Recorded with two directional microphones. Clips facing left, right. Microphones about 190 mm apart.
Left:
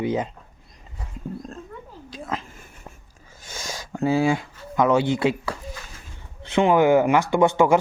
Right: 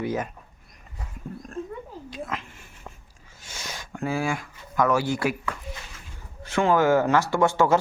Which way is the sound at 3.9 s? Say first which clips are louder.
Left 7 dB; 25° left (ahead or behind).